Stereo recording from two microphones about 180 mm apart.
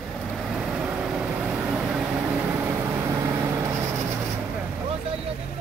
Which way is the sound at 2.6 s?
15° right (ahead or behind).